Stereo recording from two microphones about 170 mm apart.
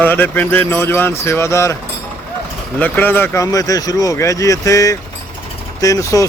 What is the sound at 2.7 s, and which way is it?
Speech, 10° left (ahead or behind).